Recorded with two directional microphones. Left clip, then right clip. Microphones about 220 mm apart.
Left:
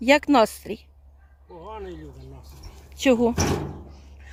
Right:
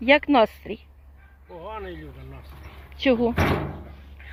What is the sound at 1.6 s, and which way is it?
Speech, 5° right (ahead or behind).